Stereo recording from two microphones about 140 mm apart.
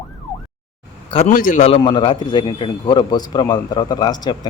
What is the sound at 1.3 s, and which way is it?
Speech, 75° left (ahead or behind).